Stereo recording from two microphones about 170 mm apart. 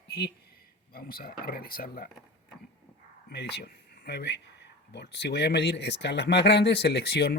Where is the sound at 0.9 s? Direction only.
60° left (ahead or behind).